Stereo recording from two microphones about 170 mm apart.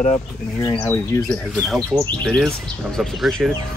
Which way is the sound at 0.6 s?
15° left (ahead or behind).